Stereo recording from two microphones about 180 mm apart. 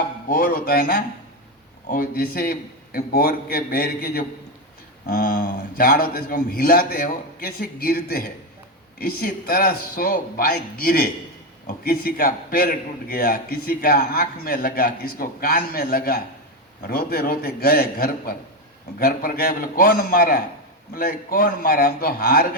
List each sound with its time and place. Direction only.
0.3 s a man's voice: 55° left (ahead or behind)